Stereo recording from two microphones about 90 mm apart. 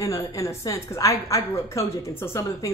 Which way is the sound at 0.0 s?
35° left (ahead or behind).